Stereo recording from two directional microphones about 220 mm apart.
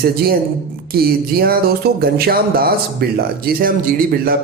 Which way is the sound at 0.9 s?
45° right (ahead or behind).